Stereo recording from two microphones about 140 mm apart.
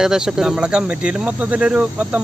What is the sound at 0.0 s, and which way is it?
Cricket, 5° right (ahead or behind).